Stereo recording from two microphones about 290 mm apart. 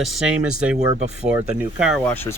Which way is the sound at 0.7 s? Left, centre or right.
Right.